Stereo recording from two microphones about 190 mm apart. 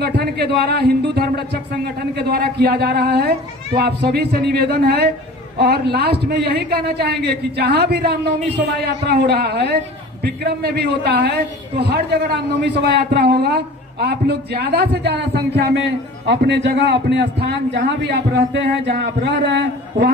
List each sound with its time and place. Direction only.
0.0 s a man's voice: 60° right (ahead or behind)